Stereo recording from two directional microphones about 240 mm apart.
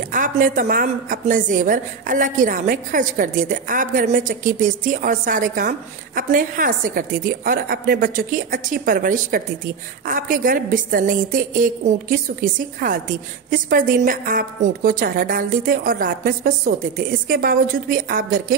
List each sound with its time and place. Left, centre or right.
0.1 s a woman's voice: right